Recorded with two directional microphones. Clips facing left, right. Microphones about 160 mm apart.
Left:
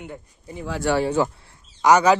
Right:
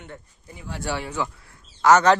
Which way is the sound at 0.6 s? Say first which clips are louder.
Left 7 dB; 90° left.